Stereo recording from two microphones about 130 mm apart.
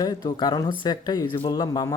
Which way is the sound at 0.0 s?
35° left (ahead or behind).